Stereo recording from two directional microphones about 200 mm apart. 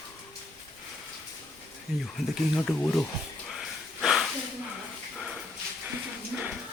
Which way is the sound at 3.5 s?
Centre (ahead or behind).